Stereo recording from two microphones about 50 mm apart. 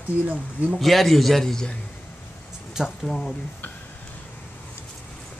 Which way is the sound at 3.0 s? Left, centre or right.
Centre.